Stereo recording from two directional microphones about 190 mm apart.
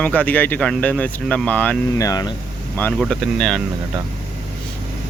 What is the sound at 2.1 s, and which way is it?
Speech, 20° left (ahead or behind).